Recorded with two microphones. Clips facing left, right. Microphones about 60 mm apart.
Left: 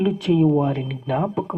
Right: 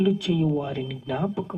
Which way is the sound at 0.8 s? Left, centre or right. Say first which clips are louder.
Left 4 dB; left.